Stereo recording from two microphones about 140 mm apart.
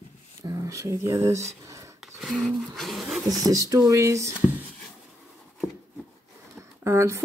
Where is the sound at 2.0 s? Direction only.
Centre (ahead or behind).